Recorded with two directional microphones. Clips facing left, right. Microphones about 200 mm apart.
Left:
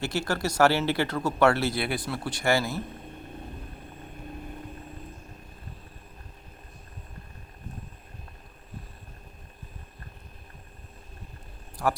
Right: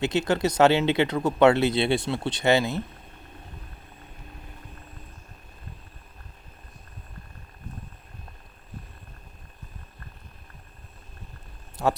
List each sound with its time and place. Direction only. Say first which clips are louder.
0.0 s speech: right 5 dB; 20° right (ahead or behind)
11.8 s speech: right 3 dB; 25° right (ahead or behind)